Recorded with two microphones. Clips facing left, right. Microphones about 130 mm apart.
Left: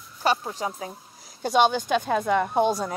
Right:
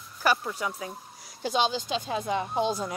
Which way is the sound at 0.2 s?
25° left (ahead or behind).